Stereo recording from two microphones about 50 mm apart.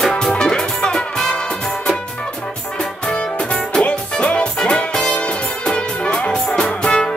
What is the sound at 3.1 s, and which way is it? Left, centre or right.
Music, centre.